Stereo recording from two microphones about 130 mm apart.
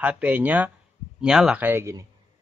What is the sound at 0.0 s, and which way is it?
Speech, 10° right (ahead or behind).